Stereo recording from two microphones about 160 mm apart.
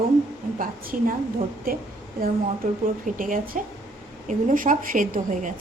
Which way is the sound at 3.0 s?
55° right (ahead or behind).